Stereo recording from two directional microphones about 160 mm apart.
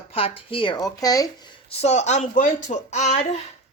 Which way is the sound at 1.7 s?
45° left (ahead or behind).